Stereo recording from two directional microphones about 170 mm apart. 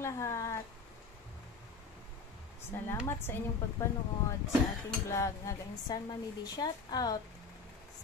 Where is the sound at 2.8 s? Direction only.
15° left (ahead or behind).